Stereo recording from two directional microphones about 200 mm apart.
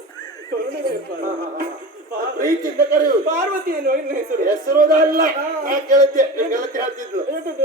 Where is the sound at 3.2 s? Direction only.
40° right (ahead or behind).